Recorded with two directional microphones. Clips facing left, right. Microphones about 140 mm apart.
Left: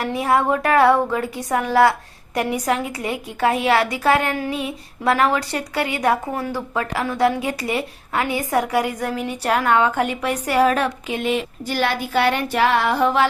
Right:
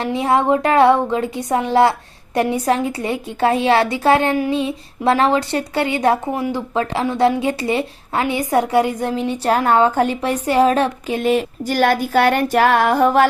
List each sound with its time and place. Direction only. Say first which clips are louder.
0.0 s speech: right 2 dB; 25° right (ahead or behind); by 13.2 s 45° right (ahead or behind)